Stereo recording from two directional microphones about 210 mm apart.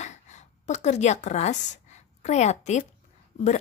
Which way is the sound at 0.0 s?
35° left (ahead or behind).